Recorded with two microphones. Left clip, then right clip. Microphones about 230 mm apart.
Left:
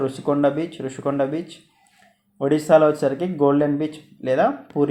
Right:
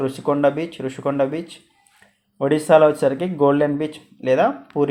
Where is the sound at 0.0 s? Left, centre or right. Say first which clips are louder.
Right 2 dB; right.